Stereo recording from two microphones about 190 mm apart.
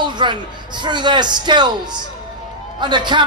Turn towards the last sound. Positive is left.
turn(degrees=-25)  # may be behind; listen again after turning